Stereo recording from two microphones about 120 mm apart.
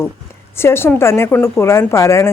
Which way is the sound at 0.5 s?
20° left (ahead or behind).